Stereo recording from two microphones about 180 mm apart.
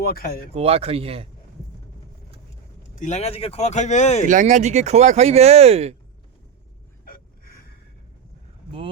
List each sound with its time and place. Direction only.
0.0 s speech: 55° left (ahead or behind)
0.5 s speech: 35° right (ahead or behind)
2.9 s speech: 45° left (ahead or behind)
4.3 s speech: 45° right (ahead or behind)
7.0 s a sound: 55° left (ahead or behind)